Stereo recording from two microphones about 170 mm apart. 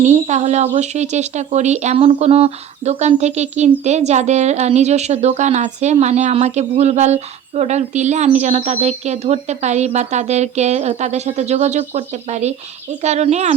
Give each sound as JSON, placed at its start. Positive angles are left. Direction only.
{"t": 0.0, "sound": "a woman's voice", "side_deg": -40}